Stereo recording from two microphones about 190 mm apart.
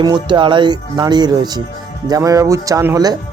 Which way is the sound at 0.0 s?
25° right (ahead or behind).